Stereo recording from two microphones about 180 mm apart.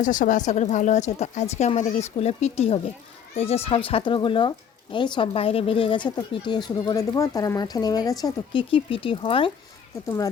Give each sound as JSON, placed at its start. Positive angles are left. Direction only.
{"t": 0.0, "sound": "speech", "side_deg": 45}